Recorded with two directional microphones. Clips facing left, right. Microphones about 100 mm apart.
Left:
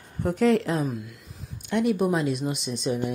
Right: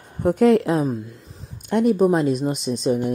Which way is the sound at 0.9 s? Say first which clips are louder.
Right 6 dB; 30° right (ahead or behind).